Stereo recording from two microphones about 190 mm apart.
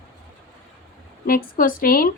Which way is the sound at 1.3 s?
50° left (ahead or behind).